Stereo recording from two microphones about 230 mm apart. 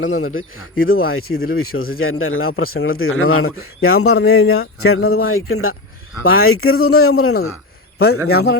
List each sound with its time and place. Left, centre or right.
0.0 s speech: left
7.4 s a sound: left
8.1 s speech: left